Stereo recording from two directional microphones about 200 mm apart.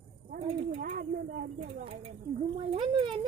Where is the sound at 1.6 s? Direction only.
30° right (ahead or behind).